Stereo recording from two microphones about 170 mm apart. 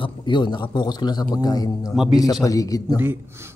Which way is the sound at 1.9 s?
Centre (ahead or behind).